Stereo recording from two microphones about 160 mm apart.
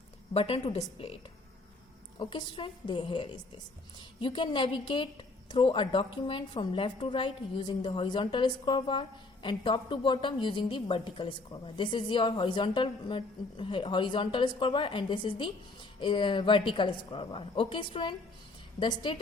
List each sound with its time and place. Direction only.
0.3 s a woman's voice: 40° left (ahead or behind)
2.1 s a woman's voice: 30° left (ahead or behind)